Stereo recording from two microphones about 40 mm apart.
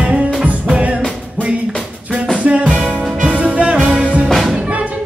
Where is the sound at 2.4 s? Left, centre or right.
Right.